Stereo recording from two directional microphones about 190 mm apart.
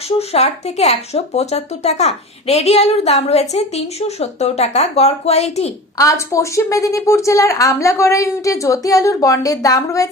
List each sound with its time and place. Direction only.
0.2 s speech: 35° left (ahead or behind)
6.0 s a woman's voice: 15° left (ahead or behind)